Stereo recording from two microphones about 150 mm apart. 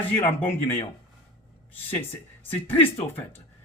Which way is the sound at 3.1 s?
15° left (ahead or behind).